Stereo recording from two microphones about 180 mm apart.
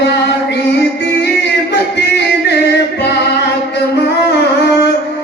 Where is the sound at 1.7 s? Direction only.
70° left (ahead or behind).